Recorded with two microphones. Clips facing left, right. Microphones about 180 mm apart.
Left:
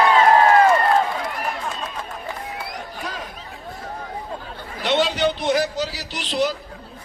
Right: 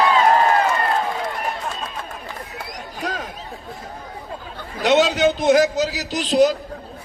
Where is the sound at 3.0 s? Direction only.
45° right (ahead or behind).